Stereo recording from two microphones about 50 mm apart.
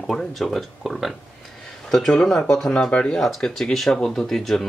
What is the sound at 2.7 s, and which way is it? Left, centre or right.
Speech, left.